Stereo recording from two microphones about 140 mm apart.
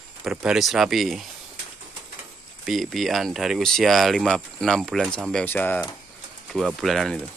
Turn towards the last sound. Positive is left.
turn(degrees=0)  # may be behind; listen again after turning